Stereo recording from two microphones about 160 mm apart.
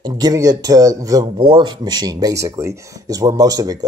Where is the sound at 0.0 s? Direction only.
25° right (ahead or behind).